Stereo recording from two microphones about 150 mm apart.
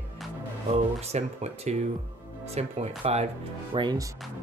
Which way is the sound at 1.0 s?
45° right (ahead or behind).